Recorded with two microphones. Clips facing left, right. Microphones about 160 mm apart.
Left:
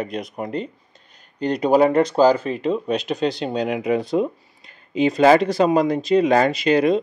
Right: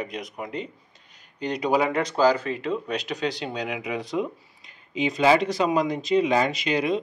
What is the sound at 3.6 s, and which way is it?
Speech, 50° left (ahead or behind).